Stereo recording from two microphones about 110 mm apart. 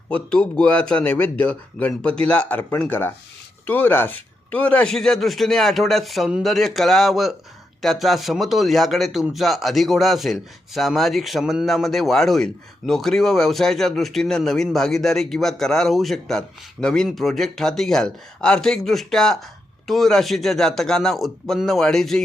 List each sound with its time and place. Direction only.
0.1 s a man's voice: 10° left (ahead or behind)